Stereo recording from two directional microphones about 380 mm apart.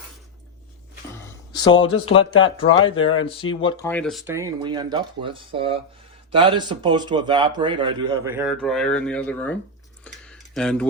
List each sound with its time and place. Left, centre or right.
1.1 s a sound: centre
2.0 s a man's voice: centre
10.0 s tick: centre